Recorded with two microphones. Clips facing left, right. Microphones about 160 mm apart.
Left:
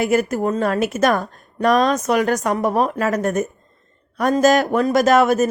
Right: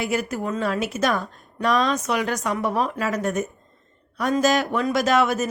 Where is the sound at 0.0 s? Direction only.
50° left (ahead or behind).